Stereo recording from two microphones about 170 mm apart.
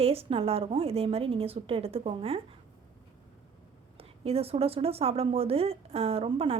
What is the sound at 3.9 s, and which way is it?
A woman's voice, 35° right (ahead or behind).